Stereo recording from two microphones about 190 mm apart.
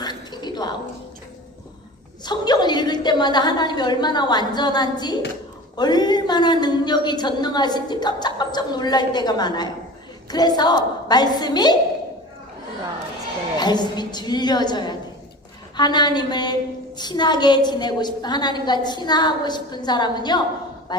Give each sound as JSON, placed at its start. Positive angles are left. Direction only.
{"t": 0.0, "sound": "a sound", "side_deg": 20}
{"t": 2.2, "sound": "a woman's voice", "side_deg": 20}
{"t": 13.6, "sound": "a woman's voice", "side_deg": 20}